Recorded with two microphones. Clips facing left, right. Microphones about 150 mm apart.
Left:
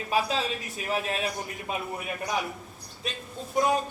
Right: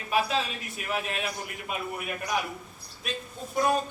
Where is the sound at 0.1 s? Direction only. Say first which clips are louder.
Even; 30° left (ahead or behind).